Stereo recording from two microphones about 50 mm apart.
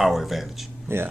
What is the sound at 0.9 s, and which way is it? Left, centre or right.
Speech, right.